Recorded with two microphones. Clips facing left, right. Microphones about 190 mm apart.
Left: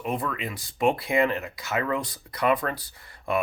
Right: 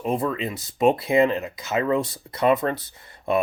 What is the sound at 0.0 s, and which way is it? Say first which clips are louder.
Speech: right 5 dB; 25° right (ahead or behind).